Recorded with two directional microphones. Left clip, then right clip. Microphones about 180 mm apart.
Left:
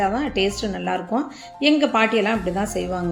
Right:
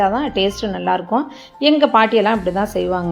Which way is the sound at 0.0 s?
5° right (ahead or behind).